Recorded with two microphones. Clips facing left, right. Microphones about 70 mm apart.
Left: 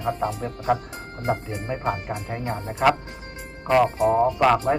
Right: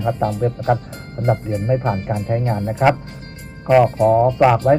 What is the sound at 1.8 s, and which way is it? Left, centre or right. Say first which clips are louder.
Speech: right 6 dB; centre.